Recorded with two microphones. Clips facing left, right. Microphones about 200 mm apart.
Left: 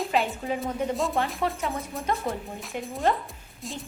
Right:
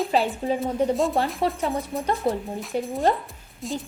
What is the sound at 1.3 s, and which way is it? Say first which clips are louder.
A woman's voice: right 4 dB; 35° right (ahead or behind).